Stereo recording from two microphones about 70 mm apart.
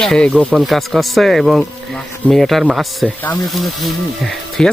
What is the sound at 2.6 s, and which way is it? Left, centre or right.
Speech, centre.